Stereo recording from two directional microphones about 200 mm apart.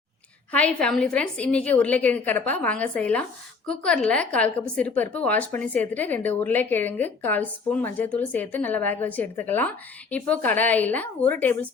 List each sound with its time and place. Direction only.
0.5 s a woman's voice: 5° left (ahead or behind)